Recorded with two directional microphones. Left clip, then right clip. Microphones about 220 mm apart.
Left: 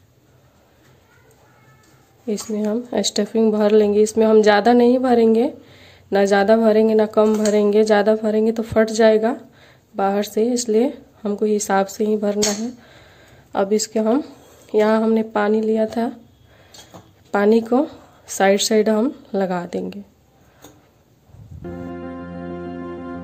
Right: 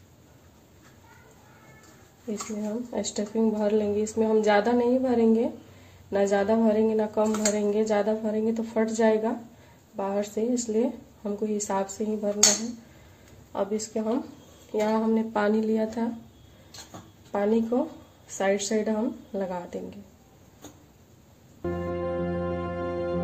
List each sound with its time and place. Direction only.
2.2 s speech: 45° left (ahead or behind)
13.5 s speech: 45° left (ahead or behind)
17.3 s speech: 50° left (ahead or behind)